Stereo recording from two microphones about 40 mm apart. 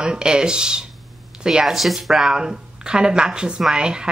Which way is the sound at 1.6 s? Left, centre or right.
Centre.